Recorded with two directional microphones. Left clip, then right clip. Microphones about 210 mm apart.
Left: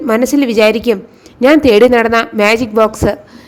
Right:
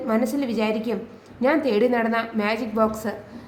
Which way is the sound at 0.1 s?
40° left (ahead or behind).